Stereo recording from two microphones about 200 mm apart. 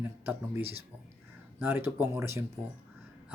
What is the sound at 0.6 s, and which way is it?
Speech, 30° right (ahead or behind).